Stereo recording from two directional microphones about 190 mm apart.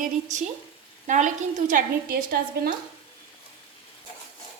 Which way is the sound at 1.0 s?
40° right (ahead or behind).